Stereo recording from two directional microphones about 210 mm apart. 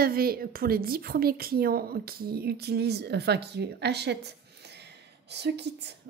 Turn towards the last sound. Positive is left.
turn(degrees=-55)  # may be behind; listen again after turning